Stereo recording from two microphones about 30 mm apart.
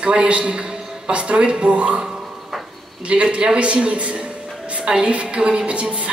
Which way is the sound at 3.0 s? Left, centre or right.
Right.